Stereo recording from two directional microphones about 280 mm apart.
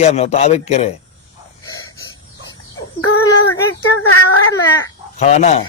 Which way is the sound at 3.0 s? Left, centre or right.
Left.